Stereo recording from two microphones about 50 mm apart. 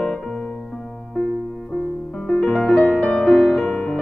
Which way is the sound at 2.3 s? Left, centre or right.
Centre.